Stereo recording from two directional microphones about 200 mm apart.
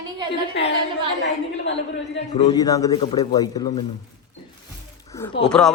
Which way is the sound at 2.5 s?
20° left (ahead or behind).